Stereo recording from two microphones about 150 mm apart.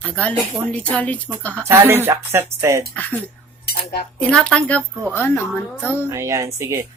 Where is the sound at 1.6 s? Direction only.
15° right (ahead or behind).